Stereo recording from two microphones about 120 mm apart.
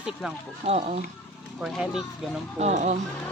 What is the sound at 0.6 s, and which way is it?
Speech, 60° right (ahead or behind).